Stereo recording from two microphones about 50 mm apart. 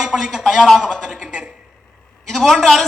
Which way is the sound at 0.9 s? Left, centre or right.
Centre.